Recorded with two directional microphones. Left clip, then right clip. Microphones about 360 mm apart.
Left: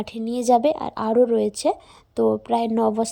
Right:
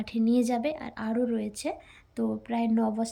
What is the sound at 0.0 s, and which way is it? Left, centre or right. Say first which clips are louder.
A woman's voice: left 3 dB; centre.